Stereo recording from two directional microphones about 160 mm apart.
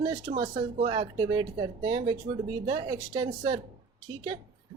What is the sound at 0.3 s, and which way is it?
Speech, 40° right (ahead or behind).